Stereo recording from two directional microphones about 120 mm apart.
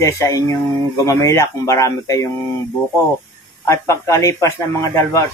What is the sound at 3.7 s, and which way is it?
A man's voice, 25° left (ahead or behind).